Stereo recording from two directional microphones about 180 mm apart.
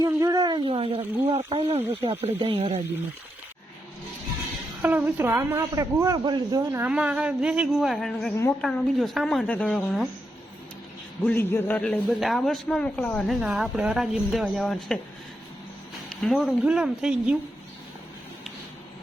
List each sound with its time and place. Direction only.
0.0 s speech: 20° right (ahead or behind)
4.8 s speech: 10° right (ahead or behind)
6.8 s a man's voice: 5° right (ahead or behind)
11.2 s a man's voice: 10° left (ahead or behind)
16.0 s a man's voice: centre (ahead or behind)